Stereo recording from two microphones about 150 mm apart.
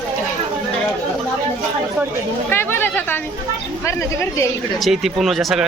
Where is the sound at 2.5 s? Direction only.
15° left (ahead or behind).